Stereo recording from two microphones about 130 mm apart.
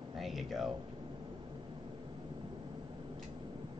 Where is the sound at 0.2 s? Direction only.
Centre (ahead or behind).